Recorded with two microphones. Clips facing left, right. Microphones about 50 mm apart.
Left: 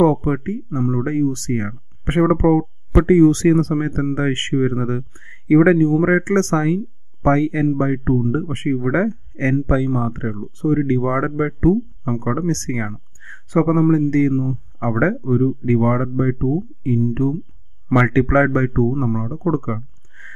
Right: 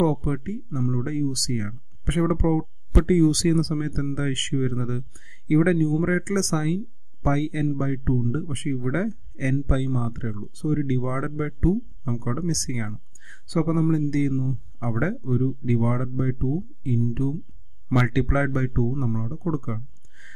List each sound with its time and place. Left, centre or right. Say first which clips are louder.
0.0 s speech: left 7 dB; left